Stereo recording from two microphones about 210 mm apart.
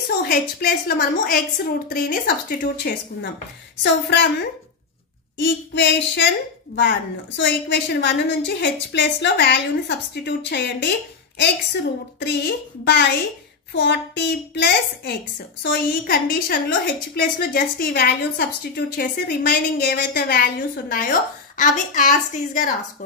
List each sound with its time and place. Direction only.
0.2 s a woman's voice: 45° left (ahead or behind)
3.8 s a woman's voice: 55° left (ahead or behind); by 22.8 s 35° left (ahead or behind)